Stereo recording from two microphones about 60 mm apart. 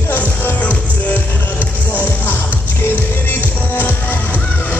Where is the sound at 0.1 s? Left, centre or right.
Left.